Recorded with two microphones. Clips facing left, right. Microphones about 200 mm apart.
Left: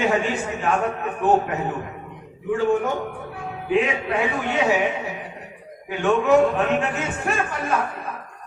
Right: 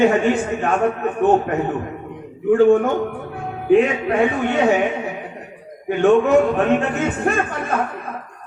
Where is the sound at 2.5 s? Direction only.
55° right (ahead or behind).